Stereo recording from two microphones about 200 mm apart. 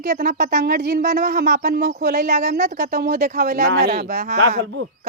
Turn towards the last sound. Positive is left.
turn(degrees=-60)  # may be behind; listen again after turning